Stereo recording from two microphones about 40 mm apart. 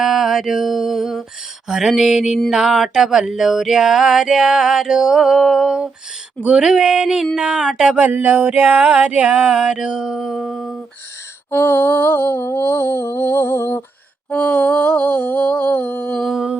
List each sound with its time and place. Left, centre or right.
0.0 s mantra: centre
1.6 s music: centre
7.9 s music: right
10.2 s humming: centre
11.5 s a sound: left
14.3 s humming: left